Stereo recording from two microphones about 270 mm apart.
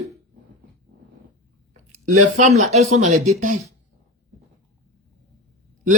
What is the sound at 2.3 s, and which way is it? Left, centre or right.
Speech, right.